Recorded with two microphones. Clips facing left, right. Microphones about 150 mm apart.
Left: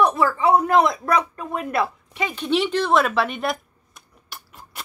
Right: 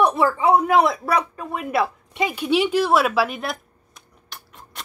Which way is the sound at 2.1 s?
15° right (ahead or behind).